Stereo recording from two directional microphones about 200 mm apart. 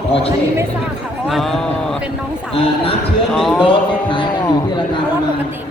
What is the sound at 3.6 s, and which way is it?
A man's voice, 25° left (ahead or behind).